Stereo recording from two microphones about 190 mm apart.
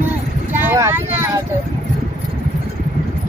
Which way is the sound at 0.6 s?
10° right (ahead or behind).